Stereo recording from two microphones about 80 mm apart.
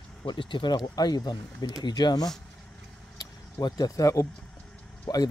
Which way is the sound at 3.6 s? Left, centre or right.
Left.